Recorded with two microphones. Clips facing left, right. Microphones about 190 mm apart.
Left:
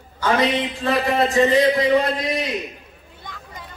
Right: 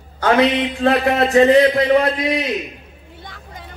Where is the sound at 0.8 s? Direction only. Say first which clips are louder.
Right 4 dB; 65° right (ahead or behind).